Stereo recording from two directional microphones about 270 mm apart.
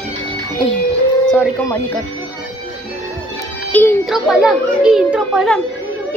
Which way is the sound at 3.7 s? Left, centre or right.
Centre.